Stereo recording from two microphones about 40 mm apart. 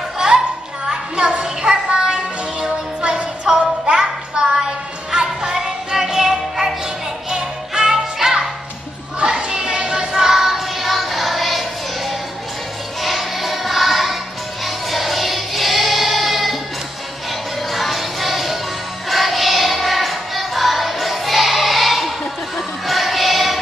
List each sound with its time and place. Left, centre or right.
0.8 s music: right
9.2 s child singing: right; by 12.2 s centre
13.0 s music: centre
14.6 s choir: centre
17.3 s music: centre